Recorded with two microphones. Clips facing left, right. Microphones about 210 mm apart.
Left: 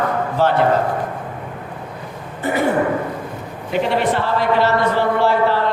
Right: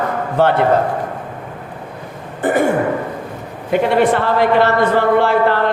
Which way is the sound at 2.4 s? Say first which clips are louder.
Right 4 dB; 50° right (ahead or behind).